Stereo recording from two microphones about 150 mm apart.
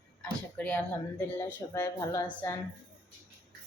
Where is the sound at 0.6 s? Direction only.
10° left (ahead or behind).